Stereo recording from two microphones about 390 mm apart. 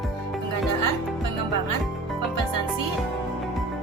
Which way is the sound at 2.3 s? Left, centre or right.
Right.